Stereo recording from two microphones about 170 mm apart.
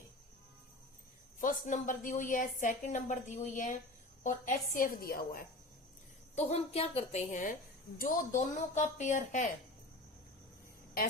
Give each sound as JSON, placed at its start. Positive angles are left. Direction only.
{"t": 1.4, "sound": "a woman's voice", "side_deg": 50}
{"t": 6.3, "sound": "a woman's voice", "side_deg": 40}